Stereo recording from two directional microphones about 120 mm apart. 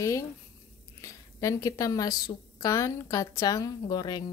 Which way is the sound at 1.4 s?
30° left (ahead or behind).